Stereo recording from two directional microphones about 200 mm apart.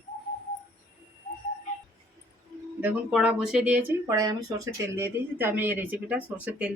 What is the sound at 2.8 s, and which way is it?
Speech, 5° right (ahead or behind).